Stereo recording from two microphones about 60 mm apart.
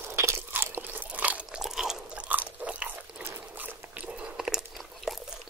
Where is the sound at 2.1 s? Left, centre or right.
Right.